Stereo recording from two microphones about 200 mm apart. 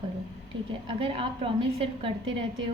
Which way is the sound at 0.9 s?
25° right (ahead or behind).